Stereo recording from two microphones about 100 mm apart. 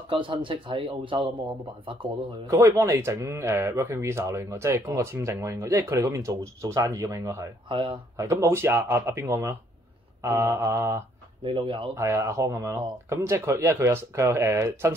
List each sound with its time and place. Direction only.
0.1 s speech: 55° right (ahead or behind)
2.4 s speech: 30° right (ahead or behind)
7.6 s speech: 60° right (ahead or behind)
8.2 s speech: 30° right (ahead or behind)
11.4 s speech: 60° right (ahead or behind)
11.9 s speech: 30° right (ahead or behind)